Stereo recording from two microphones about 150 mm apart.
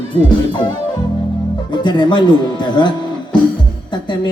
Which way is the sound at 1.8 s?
30° left (ahead or behind).